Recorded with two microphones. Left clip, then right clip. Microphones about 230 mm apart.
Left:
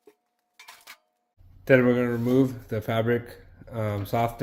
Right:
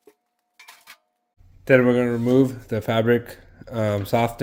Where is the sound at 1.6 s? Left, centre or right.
Centre.